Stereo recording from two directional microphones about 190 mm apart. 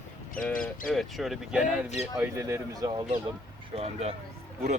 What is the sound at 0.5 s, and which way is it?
Speech, 45° left (ahead or behind).